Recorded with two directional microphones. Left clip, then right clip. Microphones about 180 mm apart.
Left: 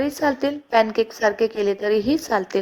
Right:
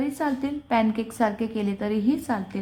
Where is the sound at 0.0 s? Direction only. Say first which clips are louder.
Left 6 dB; 35° left (ahead or behind).